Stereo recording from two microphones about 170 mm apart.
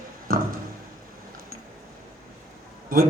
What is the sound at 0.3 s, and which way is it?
Tick-tock, 55° right (ahead or behind).